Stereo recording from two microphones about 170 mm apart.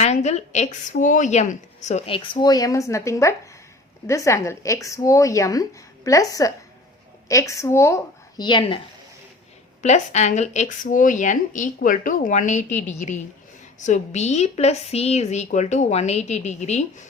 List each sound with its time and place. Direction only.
0.0 s a woman's voice: 40° left (ahead or behind)
9.8 s a woman's voice: 45° left (ahead or behind)